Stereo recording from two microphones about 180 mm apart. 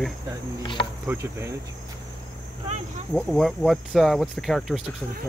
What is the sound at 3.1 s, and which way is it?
Speech, centre (ahead or behind).